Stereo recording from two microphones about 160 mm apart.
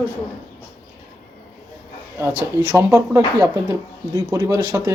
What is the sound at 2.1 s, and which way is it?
Speech, 15° right (ahead or behind).